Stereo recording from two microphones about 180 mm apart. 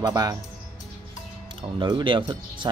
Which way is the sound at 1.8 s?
25° right (ahead or behind).